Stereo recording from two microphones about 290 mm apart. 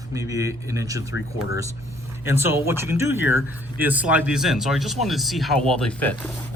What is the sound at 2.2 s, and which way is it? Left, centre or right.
Speech, centre.